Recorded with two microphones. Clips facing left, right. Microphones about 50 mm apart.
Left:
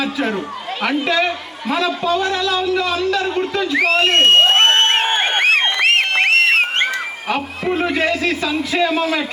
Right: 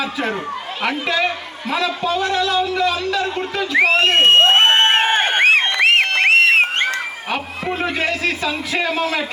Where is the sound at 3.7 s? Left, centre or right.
Centre.